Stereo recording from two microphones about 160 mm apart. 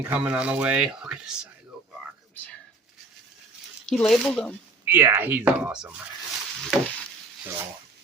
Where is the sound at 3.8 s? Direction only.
Centre (ahead or behind).